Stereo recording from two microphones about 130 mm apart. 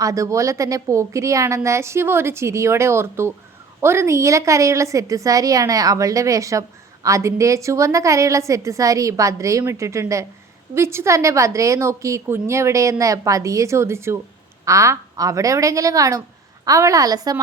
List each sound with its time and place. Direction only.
0.0 s a woman's voice: 25° right (ahead or behind)